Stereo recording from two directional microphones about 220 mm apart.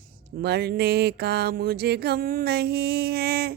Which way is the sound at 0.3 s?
45° right (ahead or behind).